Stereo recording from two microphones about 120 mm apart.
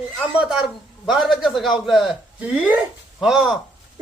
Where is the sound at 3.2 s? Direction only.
5° right (ahead or behind).